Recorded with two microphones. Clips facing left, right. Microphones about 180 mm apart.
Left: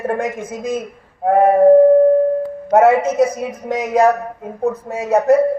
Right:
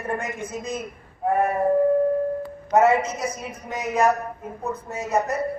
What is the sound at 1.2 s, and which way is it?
Speech, 75° left (ahead or behind).